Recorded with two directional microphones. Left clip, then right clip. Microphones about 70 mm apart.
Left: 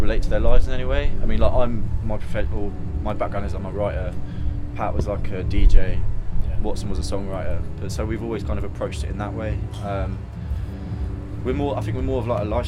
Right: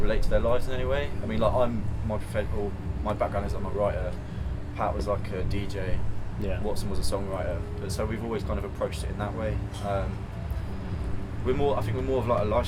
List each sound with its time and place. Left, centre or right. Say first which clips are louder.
0.0 s speech: left 2 dB; left
11.4 s speech: left 1 dB; left